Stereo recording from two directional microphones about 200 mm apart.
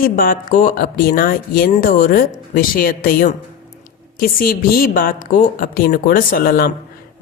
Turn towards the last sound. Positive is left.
turn(degrees=45)  # may be behind; listen again after turning